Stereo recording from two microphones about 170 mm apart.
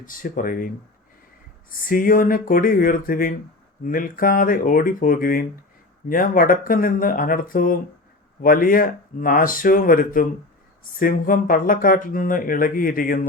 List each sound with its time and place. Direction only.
0.0 s speech: 55° left (ahead or behind)
1.7 s speech: 55° left (ahead or behind)